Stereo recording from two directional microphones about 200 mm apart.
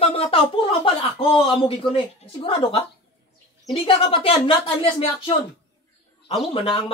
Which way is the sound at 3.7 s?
25° left (ahead or behind).